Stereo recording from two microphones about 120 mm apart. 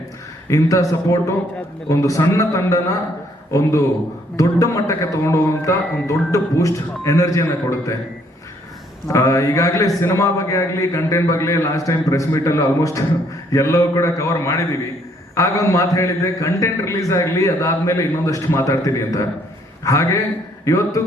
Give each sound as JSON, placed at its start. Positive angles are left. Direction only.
{"t": 0.4, "sound": "a man's voice", "side_deg": 25}
{"t": 9.1, "sound": "a man's voice", "side_deg": 25}